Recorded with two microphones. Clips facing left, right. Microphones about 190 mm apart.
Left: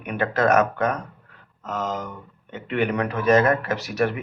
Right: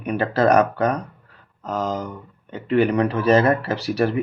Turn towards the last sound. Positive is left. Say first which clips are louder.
# right 3 dB
turn(degrees=-30)  # may be behind; listen again after turning